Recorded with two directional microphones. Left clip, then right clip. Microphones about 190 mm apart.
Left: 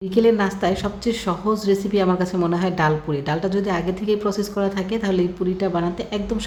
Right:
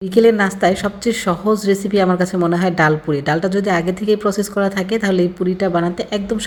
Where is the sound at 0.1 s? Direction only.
20° right (ahead or behind).